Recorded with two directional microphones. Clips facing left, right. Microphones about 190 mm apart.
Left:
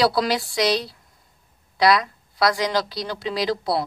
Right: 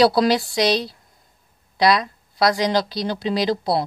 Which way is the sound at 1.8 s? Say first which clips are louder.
Even; 20° right (ahead or behind).